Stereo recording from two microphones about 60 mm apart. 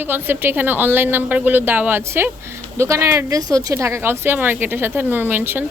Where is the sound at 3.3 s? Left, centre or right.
Right.